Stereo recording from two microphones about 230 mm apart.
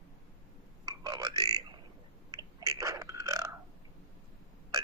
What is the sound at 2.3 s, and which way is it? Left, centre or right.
Burping, centre.